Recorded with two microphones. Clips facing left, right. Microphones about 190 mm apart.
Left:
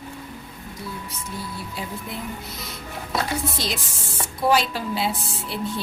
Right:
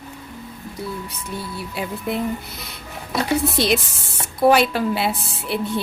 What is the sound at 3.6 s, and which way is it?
A woman's voice, 65° right (ahead or behind).